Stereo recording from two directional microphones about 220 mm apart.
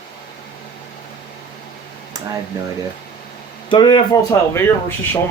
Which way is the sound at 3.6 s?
20° left (ahead or behind).